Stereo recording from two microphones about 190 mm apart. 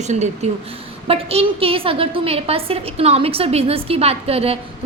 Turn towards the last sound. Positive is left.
turn(degrees=-30)  # may be behind; listen again after turning